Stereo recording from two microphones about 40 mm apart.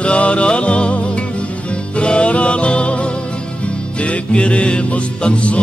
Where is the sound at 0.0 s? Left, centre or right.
Left.